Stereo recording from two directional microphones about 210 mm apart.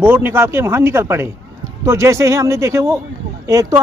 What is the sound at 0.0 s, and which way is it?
Speech, 10° right (ahead or behind).